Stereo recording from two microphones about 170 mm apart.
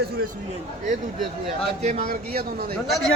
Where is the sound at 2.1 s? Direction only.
60° right (ahead or behind).